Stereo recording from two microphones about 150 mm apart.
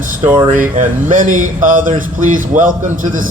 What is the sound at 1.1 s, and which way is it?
Speech, 60° right (ahead or behind).